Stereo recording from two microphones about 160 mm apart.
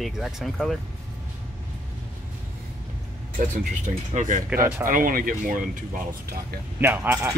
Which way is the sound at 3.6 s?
50° right (ahead or behind).